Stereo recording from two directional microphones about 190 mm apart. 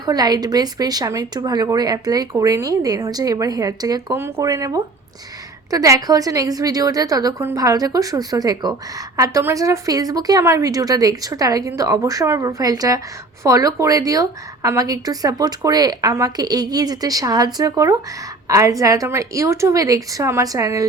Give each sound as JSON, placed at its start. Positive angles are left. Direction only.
{"t": 0.0, "sound": "a woman's voice", "side_deg": -20}